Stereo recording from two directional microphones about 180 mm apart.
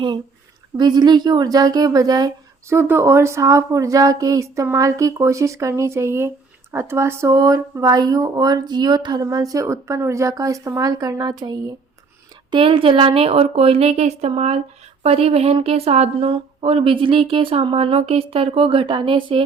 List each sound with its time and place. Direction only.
0.8 s speech: 25° right (ahead or behind)